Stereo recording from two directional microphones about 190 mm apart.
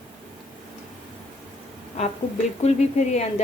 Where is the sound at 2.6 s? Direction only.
35° left (ahead or behind).